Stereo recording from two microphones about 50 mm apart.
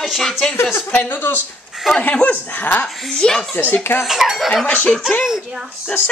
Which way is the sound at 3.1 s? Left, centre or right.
Centre.